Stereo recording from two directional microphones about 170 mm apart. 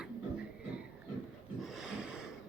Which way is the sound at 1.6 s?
5° right (ahead or behind).